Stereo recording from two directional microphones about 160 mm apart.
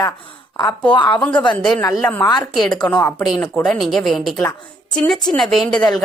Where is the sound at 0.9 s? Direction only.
30° left (ahead or behind).